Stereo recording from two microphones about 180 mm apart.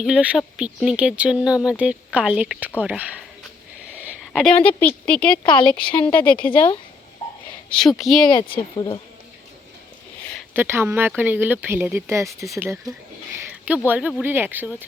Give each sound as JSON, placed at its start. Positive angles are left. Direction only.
{"t": 0.0, "sound": "speech", "side_deg": -5}
{"t": 3.9, "sound": "a sound", "side_deg": -10}
{"t": 4.3, "sound": "speech", "side_deg": 0}
{"t": 5.4, "sound": "speech", "side_deg": 25}
{"t": 6.1, "sound": "speech", "side_deg": 10}
{"t": 7.7, "sound": "speech", "side_deg": 0}
{"t": 8.5, "sound": "speech", "side_deg": 25}
{"t": 10.5, "sound": "speech", "side_deg": -15}